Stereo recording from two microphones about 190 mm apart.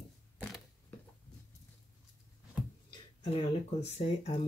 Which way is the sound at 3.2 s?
30° left (ahead or behind).